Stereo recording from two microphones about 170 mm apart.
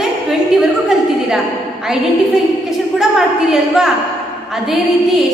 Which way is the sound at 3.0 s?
5° right (ahead or behind).